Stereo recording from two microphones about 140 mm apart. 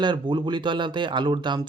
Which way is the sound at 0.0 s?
35° right (ahead or behind).